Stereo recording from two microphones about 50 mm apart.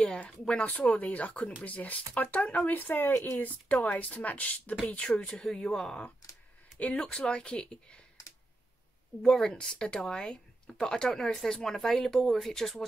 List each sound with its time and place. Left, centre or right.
0.1 s speech: left
9.5 s speech: centre